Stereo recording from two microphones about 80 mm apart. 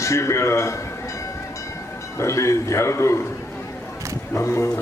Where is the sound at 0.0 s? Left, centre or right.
Left.